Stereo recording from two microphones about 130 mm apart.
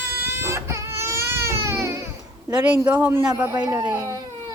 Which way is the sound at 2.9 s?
15° right (ahead or behind).